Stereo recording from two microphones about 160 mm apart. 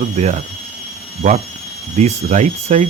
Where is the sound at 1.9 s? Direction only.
45° right (ahead or behind).